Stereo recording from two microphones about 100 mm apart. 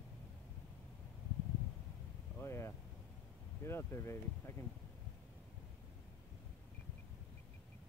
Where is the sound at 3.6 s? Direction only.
25° left (ahead or behind).